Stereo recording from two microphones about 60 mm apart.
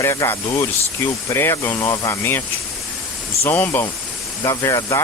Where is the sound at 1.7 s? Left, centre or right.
Left.